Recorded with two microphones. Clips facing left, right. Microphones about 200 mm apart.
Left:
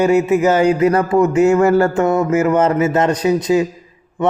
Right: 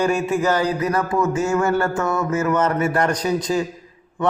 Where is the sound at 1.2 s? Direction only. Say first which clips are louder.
Left 8 dB; 60° left (ahead or behind).